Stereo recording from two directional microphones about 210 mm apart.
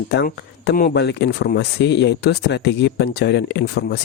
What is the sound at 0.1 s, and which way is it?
Speech, 50° left (ahead or behind).